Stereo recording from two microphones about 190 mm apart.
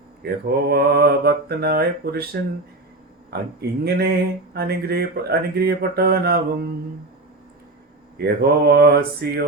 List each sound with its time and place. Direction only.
0.2 s mantra: 55° right (ahead or behind)
8.2 s mantra: 55° right (ahead or behind)